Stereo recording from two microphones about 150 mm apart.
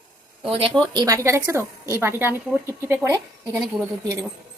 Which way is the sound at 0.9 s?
25° right (ahead or behind).